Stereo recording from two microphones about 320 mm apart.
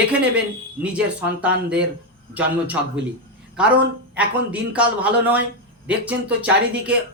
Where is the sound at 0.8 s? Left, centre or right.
Centre.